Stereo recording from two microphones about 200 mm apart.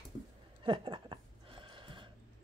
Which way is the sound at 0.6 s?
25° right (ahead or behind).